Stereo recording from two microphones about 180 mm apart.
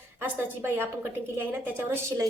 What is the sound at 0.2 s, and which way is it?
A woman's voice, 10° right (ahead or behind).